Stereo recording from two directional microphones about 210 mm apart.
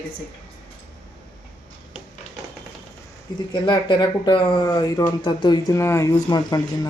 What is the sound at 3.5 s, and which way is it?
Speech, 20° left (ahead or behind).